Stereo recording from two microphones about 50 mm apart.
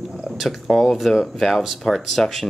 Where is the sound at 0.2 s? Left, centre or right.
Centre.